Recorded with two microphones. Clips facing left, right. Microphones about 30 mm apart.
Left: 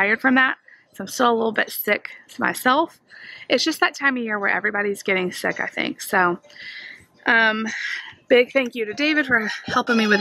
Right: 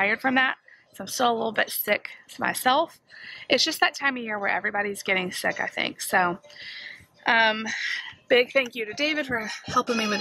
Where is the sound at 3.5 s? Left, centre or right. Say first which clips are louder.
Left 3 dB; centre.